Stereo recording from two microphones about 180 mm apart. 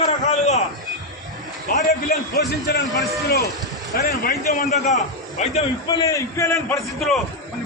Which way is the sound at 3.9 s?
60° left (ahead or behind).